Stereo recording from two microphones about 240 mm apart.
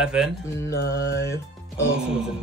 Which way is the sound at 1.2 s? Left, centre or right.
Centre.